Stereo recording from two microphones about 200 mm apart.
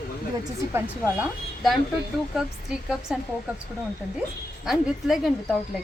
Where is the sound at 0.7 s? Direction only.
5° right (ahead or behind).